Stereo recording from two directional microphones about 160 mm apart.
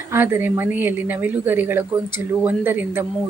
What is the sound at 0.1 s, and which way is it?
Speech, 15° right (ahead or behind).